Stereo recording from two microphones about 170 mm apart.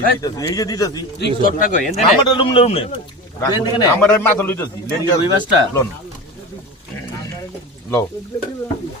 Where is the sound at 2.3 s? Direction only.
30° left (ahead or behind).